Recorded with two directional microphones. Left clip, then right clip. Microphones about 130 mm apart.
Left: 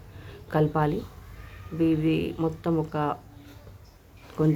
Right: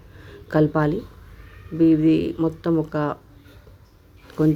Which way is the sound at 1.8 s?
30° right (ahead or behind).